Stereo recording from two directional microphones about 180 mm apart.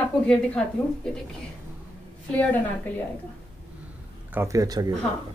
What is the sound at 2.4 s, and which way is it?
Speech, 10° left (ahead or behind).